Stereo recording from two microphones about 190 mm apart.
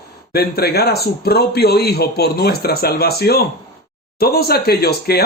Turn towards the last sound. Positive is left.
turn(degrees=55)  # may be behind; listen again after turning